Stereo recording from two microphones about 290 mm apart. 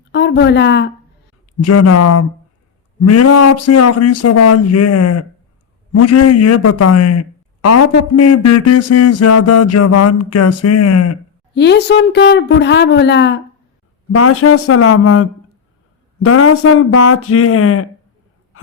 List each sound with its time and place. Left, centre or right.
0.1 s speech: left
1.5 s a man's voice: left
11.5 s speech: left
14.1 s speech: left
18.5 s a sound: left